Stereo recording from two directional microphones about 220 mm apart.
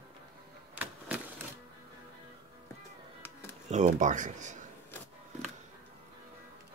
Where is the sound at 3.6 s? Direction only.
35° right (ahead or behind).